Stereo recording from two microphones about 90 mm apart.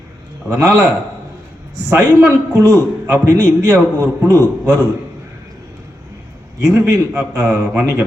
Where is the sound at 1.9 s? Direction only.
35° right (ahead or behind).